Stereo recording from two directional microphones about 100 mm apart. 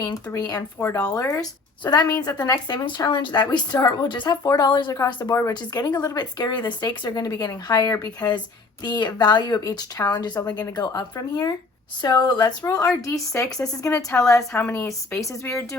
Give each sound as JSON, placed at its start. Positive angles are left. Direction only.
{"t": 0.0, "sound": "speech", "side_deg": 35}
{"t": 1.8, "sound": "a woman's voice", "side_deg": 45}
{"t": 5.2, "sound": "a woman's voice", "side_deg": 30}